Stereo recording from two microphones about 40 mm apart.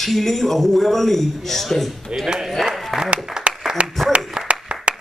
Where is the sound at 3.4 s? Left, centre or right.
Centre.